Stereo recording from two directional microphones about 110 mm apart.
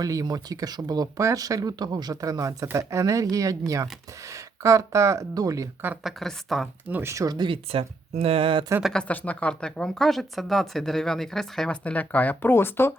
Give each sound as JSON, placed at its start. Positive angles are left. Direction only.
{"t": 0.0, "sound": "speech", "side_deg": -35}
{"t": 6.0, "sound": "speech", "side_deg": 0}
{"t": 6.8, "sound": "speech", "side_deg": -15}
{"t": 7.1, "sound": "speech", "side_deg": -30}
{"t": 7.3, "sound": "speech", "side_deg": -50}
{"t": 8.8, "sound": "speech", "side_deg": 5}
{"t": 11.8, "sound": "speech", "side_deg": 15}